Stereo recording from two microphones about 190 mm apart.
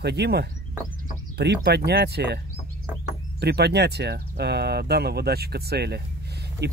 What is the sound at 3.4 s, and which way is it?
Speech, 60° right (ahead or behind).